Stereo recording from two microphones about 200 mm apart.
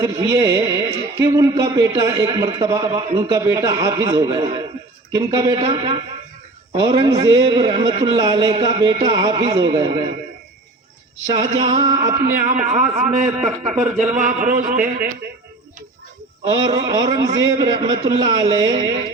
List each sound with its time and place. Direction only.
0.0 s a man's voice: 15° right (ahead or behind)
11.5 s a man's voice: 25° right (ahead or behind)
12.6 s a man's voice: 35° right (ahead or behind)
13.4 s speech: 5° right (ahead or behind)
14.2 s a man's voice: 40° right (ahead or behind)
16.5 s a man's voice: 20° right (ahead or behind)